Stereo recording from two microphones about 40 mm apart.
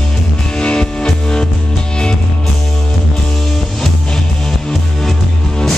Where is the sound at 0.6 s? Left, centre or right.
Left.